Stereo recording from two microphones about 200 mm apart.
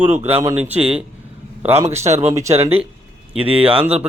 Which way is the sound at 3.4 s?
30° right (ahead or behind).